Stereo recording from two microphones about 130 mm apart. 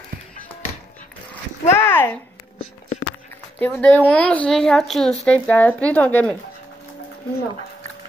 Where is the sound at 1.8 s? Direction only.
15° left (ahead or behind).